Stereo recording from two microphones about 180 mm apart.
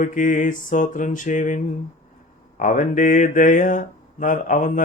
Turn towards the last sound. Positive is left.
turn(degrees=45)  # may be behind; listen again after turning